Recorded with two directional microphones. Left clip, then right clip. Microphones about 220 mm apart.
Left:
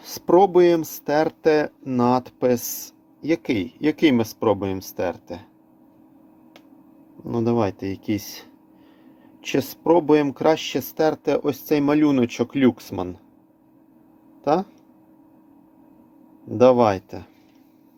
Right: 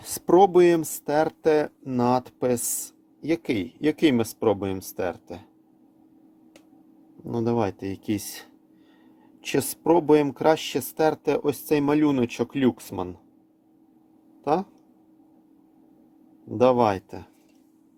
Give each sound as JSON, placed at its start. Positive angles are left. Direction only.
{"t": 0.0, "sound": "speech", "side_deg": -15}
{"t": 1.0, "sound": "speech", "side_deg": 0}
{"t": 7.3, "sound": "speech", "side_deg": -5}
{"t": 14.4, "sound": "speech", "side_deg": 0}
{"t": 16.5, "sound": "speech", "side_deg": -5}